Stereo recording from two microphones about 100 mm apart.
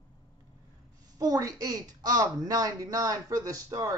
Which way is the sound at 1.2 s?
35° right (ahead or behind).